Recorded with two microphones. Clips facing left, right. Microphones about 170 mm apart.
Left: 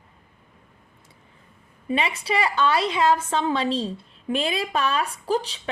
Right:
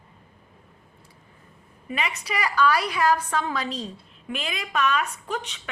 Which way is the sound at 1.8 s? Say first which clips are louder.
Left 5 dB; 30° left (ahead or behind).